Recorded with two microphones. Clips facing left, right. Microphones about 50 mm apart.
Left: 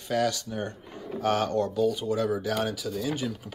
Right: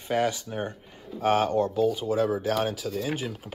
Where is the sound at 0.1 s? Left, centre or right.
Right.